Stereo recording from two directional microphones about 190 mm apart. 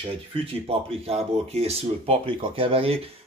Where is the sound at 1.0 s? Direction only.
35° right (ahead or behind).